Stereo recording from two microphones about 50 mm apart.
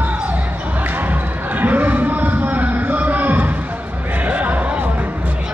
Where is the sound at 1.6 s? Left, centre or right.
Right.